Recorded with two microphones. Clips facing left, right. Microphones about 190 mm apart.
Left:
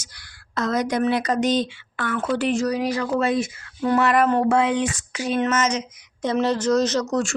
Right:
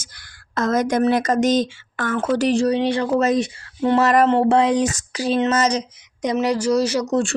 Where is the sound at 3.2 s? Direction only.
40° right (ahead or behind).